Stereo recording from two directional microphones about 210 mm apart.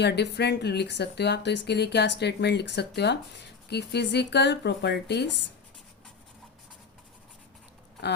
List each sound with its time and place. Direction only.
0.0 s speech: 55° left (ahead or behind)